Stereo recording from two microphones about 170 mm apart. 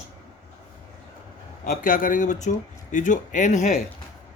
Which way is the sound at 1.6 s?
50° left (ahead or behind).